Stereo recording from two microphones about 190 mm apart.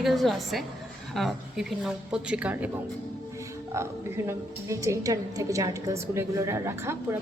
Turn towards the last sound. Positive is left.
turn(degrees=-15)  # may be behind; listen again after turning